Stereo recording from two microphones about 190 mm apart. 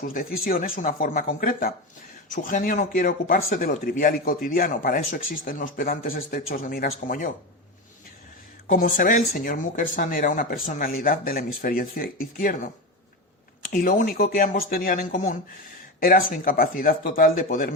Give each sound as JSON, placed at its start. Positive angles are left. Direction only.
{"t": 0.1, "sound": "speech", "side_deg": 50}
{"t": 8.6, "sound": "speech", "side_deg": 40}